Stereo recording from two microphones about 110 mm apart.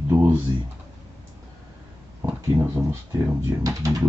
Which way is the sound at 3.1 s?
30° right (ahead or behind).